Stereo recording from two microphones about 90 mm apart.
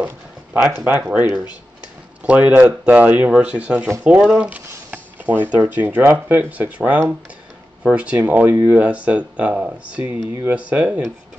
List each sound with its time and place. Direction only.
0.0 s a sound: 15° right (ahead or behind)
0.8 s speech: 20° right (ahead or behind)
2.2 s speech: 15° right (ahead or behind)